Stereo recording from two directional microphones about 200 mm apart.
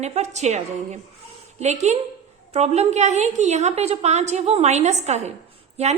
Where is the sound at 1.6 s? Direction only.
35° right (ahead or behind).